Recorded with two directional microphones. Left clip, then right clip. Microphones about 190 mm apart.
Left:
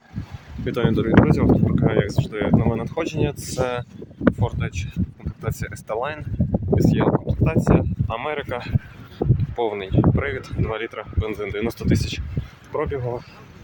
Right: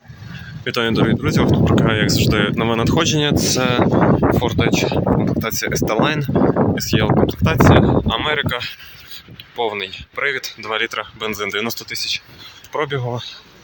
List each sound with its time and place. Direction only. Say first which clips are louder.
0.6 s speech: right 5 dB; 5° left (ahead or behind)
11.8 s speech: right 3 dB; 20° left (ahead or behind)
12.7 s speech: right 3 dB; centre (ahead or behind)